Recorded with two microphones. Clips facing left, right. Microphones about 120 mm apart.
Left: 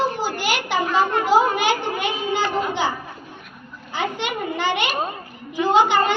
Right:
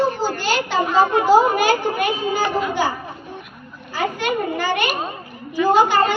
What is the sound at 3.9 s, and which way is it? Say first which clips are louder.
A child's voice: right 3 dB; 20° left (ahead or behind).